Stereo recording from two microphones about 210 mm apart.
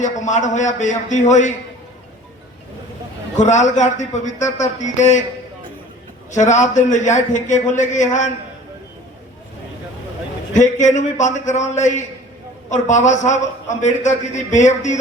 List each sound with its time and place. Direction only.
0.0 s a man's voice: 35° left (ahead or behind)
3.4 s a man's voice: 35° left (ahead or behind)
6.3 s a man's voice: 35° left (ahead or behind)
10.5 s a man's voice: 35° left (ahead or behind)